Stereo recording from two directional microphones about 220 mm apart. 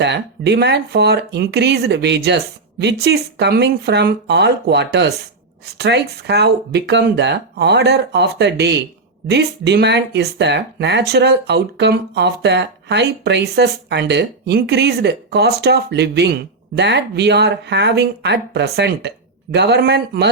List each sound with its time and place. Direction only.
0.0 s speech: 50° right (ahead or behind)